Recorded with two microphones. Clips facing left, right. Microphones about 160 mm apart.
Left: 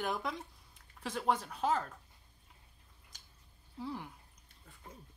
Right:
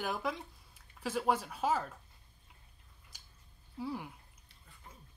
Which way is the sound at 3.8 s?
10° right (ahead or behind).